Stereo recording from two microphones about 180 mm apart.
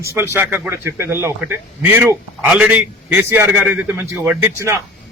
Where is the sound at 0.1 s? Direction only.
15° right (ahead or behind).